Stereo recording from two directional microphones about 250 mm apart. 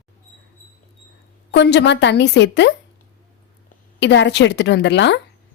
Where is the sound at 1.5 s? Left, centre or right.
Left.